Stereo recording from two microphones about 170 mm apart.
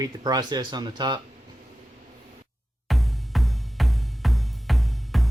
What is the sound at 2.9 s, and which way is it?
Music, centre (ahead or behind).